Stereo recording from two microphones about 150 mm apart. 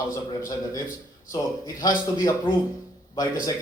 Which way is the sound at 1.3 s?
25° left (ahead or behind).